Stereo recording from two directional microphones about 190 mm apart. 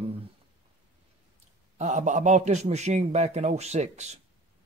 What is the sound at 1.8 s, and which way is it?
Speech, 40° right (ahead or behind).